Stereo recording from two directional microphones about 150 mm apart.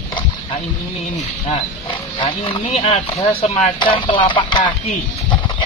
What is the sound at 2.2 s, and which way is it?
Speech, 35° left (ahead or behind).